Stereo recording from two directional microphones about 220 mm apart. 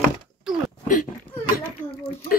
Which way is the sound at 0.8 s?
35° left (ahead or behind).